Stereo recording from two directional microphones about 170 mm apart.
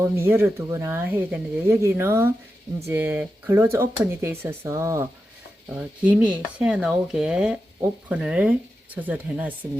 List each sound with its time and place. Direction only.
0.0 s speech: 15° right (ahead or behind)
6.1 s speech: 5° right (ahead or behind)